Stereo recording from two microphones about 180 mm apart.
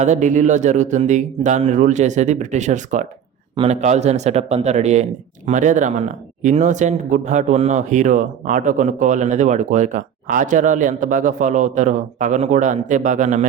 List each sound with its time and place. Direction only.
0.0 s speech: 40° right (ahead or behind)
3.5 s speech: 30° right (ahead or behind)